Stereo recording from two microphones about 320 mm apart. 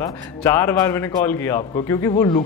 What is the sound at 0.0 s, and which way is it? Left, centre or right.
A man's voice, centre.